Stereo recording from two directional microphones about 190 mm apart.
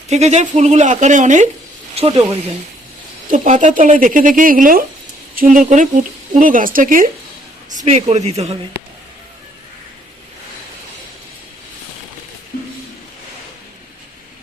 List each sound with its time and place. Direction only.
0.1 s speech: 35° right (ahead or behind)
3.3 s speech: 40° right (ahead or behind)
7.9 s speech: 35° right (ahead or behind)